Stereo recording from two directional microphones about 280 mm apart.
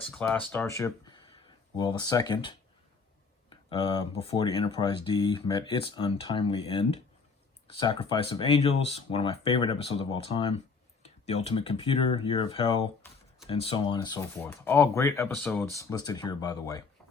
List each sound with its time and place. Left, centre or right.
0.0 s speech: centre
3.5 s speech: centre